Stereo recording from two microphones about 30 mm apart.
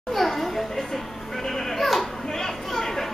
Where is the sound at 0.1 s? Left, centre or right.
Centre.